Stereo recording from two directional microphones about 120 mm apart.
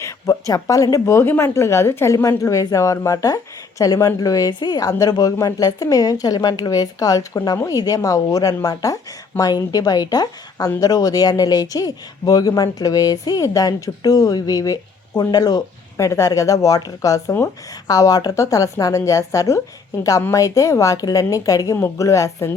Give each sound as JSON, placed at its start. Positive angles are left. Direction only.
{"t": 0.0, "sound": "speech", "side_deg": 25}